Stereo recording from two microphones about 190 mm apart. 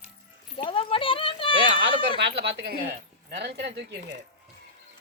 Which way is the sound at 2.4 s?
60° right (ahead or behind).